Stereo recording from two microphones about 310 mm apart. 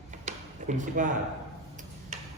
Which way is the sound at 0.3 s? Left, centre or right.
Right.